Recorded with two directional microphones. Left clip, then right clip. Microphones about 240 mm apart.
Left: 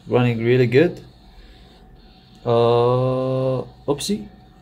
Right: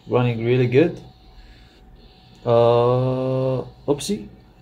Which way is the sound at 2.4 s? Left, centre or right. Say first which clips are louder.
Right 1 dB; centre.